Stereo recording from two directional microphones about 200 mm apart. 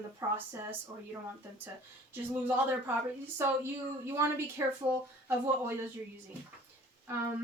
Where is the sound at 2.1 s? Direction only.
10° right (ahead or behind).